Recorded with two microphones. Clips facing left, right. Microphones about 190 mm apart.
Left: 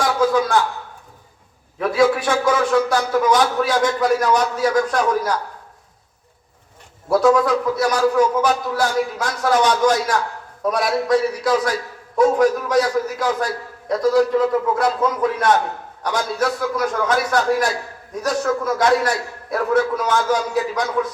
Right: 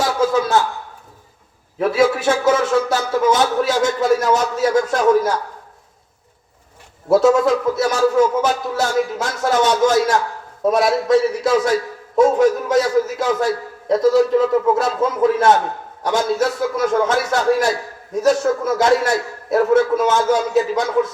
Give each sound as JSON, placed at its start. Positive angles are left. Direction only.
{"t": 0.3, "sound": "a sound", "side_deg": -25}
{"t": 1.8, "sound": "a man's voice", "side_deg": -25}
{"t": 7.1, "sound": "a man's voice", "side_deg": -25}